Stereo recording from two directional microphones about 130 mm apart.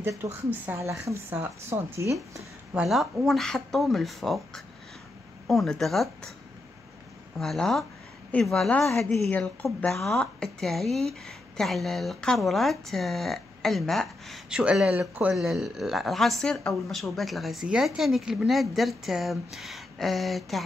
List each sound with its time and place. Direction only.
0.0 s a woman's voice: 20° right (ahead or behind)
2.7 s speech: centre (ahead or behind)
7.3 s speech: 5° left (ahead or behind)